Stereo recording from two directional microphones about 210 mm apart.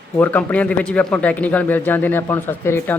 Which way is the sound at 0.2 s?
5° left (ahead or behind).